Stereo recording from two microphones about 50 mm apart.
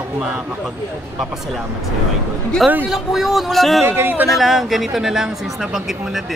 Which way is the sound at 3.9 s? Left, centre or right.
Right.